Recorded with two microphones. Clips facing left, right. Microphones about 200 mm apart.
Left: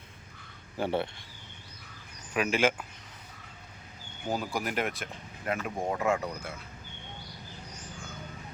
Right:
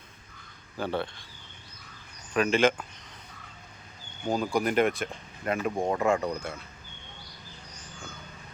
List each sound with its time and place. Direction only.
0.8 s speech: 20° left (ahead or behind)
2.3 s speech: 10° left (ahead or behind)
4.3 s speech: 5° left (ahead or behind)